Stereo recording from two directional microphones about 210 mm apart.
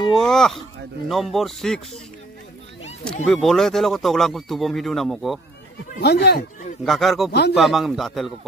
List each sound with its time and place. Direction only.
0.1 s speech: centre (ahead or behind)
3.3 s speech: centre (ahead or behind)
5.9 s speech: 50° left (ahead or behind)
6.8 s speech: centre (ahead or behind)